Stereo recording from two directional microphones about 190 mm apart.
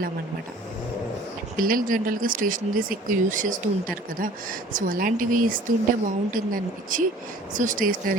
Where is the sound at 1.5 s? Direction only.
50° right (ahead or behind).